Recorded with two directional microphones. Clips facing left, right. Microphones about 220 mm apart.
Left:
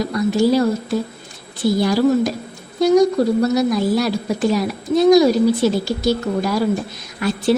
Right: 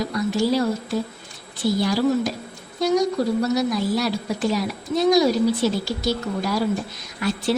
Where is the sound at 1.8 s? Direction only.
50° left (ahead or behind).